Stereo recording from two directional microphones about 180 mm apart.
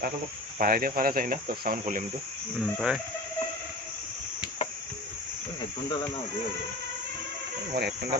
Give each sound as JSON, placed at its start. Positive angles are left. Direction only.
{"t": 0.6, "sound": "speech", "side_deg": -55}
{"t": 2.6, "sound": "speech", "side_deg": 0}
{"t": 7.7, "sound": "cricket", "side_deg": -60}